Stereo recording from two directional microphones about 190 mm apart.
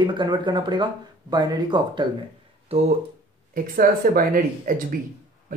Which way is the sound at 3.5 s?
50° right (ahead or behind).